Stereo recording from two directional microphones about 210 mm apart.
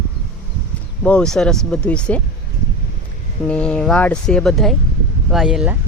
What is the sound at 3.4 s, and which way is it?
Speech, 5° left (ahead or behind).